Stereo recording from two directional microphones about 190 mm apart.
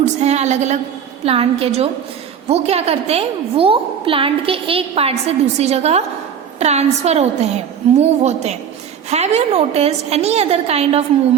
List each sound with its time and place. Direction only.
0.2 s a woman's voice: 35° right (ahead or behind)